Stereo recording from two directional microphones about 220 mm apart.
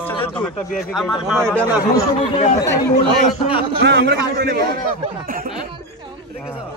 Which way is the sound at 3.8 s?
50° right (ahead or behind).